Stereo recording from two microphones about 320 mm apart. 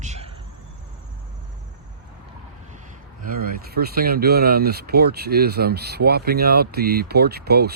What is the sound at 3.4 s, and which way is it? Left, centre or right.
Speech, right.